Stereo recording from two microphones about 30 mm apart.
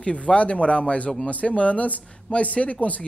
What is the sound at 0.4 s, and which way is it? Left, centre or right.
Speech, left.